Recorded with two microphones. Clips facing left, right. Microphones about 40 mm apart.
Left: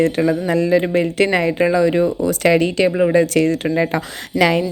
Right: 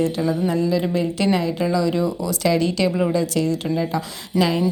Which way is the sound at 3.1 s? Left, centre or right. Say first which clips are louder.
Left 6 dB; left.